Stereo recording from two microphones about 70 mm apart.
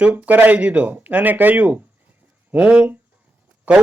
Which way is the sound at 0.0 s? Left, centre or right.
Right.